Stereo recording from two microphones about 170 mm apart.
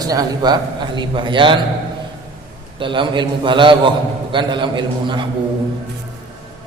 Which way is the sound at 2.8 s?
30° right (ahead or behind).